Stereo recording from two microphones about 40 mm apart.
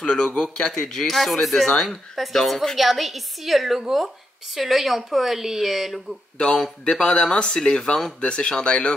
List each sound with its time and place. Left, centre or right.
0.0 s speech: centre
0.7 s speech: centre
1.1 s a woman's voice: centre
6.8 s speech: left